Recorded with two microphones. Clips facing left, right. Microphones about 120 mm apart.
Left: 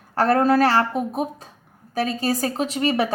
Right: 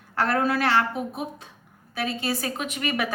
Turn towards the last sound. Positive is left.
turn(degrees=30)  # may be behind; listen again after turning